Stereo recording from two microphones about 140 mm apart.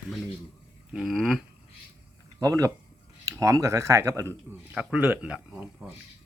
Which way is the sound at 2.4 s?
25° right (ahead or behind).